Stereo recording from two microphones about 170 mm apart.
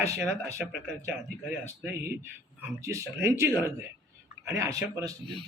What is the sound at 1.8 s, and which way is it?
Speech, 15° right (ahead or behind).